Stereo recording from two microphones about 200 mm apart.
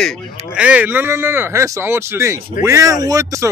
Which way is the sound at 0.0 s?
Centre (ahead or behind).